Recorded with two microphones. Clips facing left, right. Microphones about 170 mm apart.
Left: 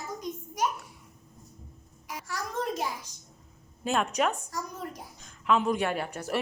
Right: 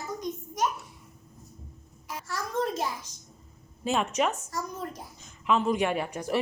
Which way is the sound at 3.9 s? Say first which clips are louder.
Even; centre (ahead or behind).